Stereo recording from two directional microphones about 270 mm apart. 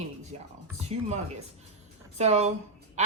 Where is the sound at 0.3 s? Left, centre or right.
Right.